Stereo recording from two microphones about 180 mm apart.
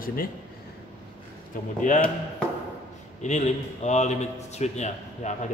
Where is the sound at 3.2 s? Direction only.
40° left (ahead or behind).